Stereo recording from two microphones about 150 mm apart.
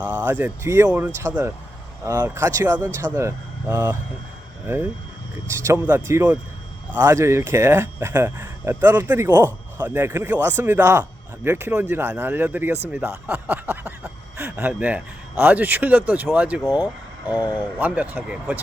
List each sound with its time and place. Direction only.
0.0 s speech: 10° right (ahead or behind)
13.1 s a sound: 15° right (ahead or behind)
14.7 s speech: 10° right (ahead or behind)